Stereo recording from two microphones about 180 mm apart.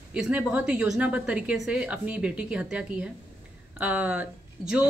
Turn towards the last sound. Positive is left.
turn(degrees=-5)  # may be behind; listen again after turning